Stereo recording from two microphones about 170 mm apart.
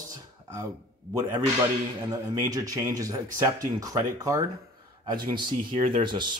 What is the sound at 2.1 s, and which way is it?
Speech, 20° right (ahead or behind).